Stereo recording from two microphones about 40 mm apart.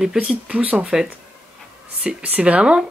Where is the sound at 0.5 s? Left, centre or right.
Right.